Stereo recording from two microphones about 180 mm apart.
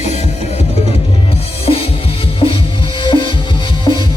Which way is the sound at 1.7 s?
30° left (ahead or behind).